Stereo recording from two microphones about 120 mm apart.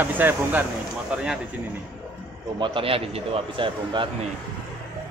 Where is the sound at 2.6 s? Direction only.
50° right (ahead or behind).